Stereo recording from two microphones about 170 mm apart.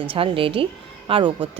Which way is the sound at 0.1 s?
30° right (ahead or behind).